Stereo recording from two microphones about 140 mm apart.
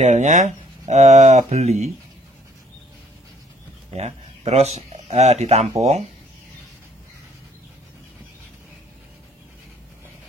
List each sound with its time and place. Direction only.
0.0 s speech: 60° right (ahead or behind)
3.9 s speech: 50° right (ahead or behind)